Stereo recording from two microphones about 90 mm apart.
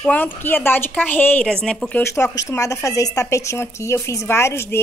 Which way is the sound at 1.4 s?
10° left (ahead or behind).